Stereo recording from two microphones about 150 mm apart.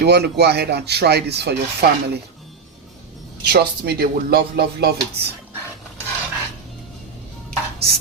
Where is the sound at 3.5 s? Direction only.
90° right.